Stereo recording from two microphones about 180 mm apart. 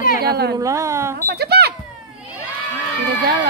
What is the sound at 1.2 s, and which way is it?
Speech, 65° right (ahead or behind).